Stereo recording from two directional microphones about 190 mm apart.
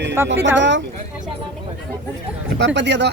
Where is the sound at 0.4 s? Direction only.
70° right (ahead or behind).